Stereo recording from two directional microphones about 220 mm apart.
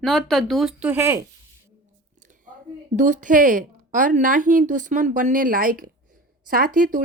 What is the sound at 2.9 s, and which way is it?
A woman's voice, 35° right (ahead or behind).